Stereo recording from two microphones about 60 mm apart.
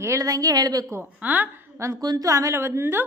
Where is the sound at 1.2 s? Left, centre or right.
Right.